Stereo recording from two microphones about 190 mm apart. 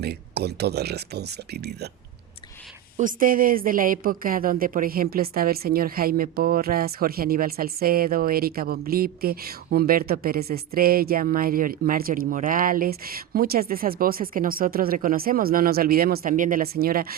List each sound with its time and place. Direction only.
0.0 s speech: 60° right (ahead or behind)
3.0 s a woman's voice: 45° right (ahead or behind)